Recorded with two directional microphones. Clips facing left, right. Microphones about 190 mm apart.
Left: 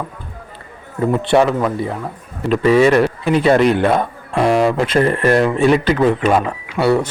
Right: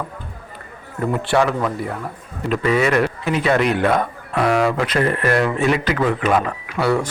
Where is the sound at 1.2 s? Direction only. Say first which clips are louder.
Left 4 dB; 20° left (ahead or behind).